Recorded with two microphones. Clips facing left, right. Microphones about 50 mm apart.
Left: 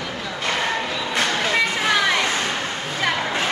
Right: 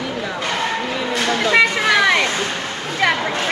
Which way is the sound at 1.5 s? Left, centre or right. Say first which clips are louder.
Right 6 dB; right.